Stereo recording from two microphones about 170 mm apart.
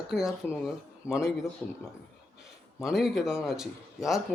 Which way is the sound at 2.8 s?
Centre (ahead or behind).